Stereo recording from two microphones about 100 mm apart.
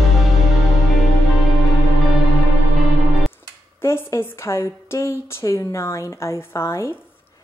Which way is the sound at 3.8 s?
25° left (ahead or behind).